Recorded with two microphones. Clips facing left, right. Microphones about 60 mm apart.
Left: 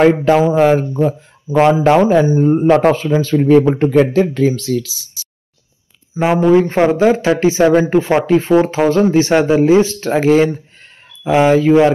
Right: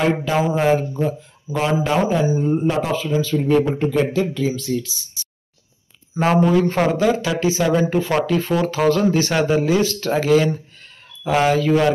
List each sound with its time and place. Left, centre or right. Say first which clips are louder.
0.0 s speech: left 8 dB; left
2.1 s speech: left 7 dB; left
6.2 s speech: left 3 dB; centre
6.5 s speech: left 6 dB; left